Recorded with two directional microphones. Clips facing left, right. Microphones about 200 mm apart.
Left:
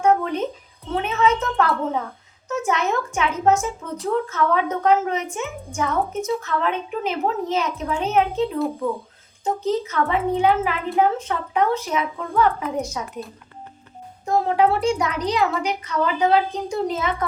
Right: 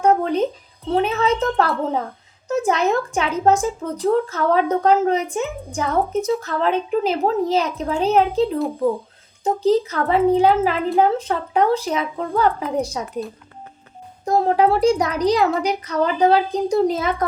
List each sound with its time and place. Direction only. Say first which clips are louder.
0.0 s a sound: right 2 dB; 35° right (ahead or behind)
0.9 s a woman's voice: right 2 dB; 35° right (ahead or behind)
14.3 s a woman's voice: right 2 dB; 40° right (ahead or behind)